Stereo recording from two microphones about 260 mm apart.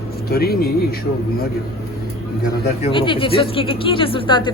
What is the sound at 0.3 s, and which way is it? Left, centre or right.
Speech, left.